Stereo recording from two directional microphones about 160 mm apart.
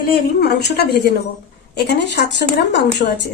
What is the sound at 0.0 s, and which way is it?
A woman's voice, 75° left (ahead or behind).